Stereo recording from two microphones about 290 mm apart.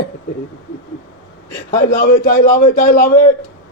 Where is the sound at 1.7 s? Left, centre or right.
Left.